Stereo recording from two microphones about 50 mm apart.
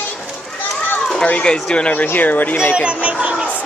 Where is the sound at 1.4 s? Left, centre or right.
Centre.